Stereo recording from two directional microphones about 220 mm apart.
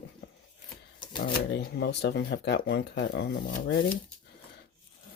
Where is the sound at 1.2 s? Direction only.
50° left (ahead or behind).